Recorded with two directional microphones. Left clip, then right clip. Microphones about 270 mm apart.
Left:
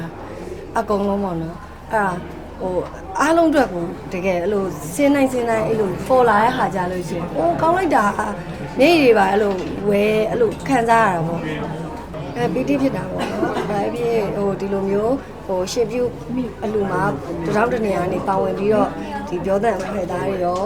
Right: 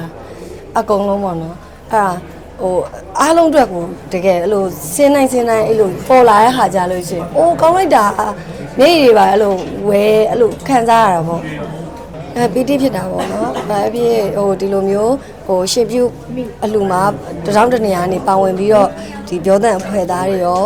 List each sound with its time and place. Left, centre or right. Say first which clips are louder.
0.7 s a woman's voice: right 6 dB; right
12.4 s a woman's voice: right 6 dB; right